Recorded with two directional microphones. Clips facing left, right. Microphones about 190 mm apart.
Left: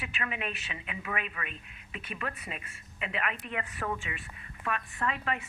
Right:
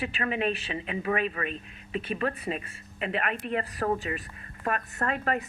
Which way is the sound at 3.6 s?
35° right (ahead or behind).